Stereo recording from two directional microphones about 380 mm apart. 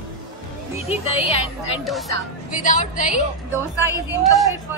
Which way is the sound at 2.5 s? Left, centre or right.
Centre.